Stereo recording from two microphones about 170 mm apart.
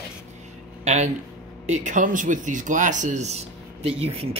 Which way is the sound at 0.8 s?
40° right (ahead or behind).